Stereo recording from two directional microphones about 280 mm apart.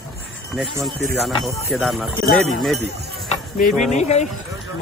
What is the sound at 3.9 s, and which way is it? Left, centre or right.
Speech, left.